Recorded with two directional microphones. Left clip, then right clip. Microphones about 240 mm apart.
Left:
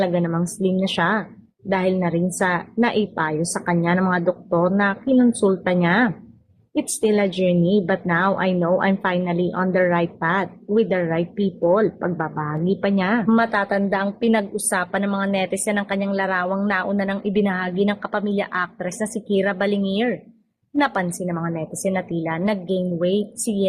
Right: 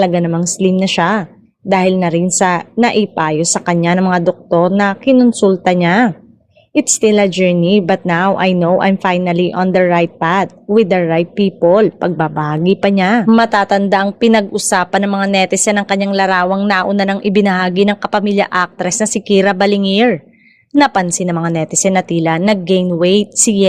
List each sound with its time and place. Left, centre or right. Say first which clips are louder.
0.0 s a woman's voice: right 8 dB; right